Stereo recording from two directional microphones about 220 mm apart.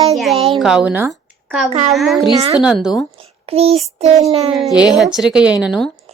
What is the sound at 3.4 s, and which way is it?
Child singing, 25° right (ahead or behind).